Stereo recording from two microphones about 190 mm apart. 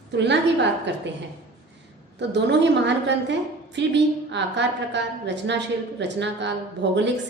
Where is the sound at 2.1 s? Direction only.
65° right (ahead or behind).